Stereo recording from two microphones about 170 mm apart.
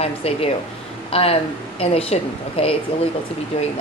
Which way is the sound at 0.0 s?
35° left (ahead or behind).